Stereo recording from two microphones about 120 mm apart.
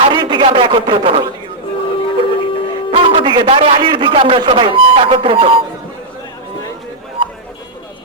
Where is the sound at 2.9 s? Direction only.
50° right (ahead or behind).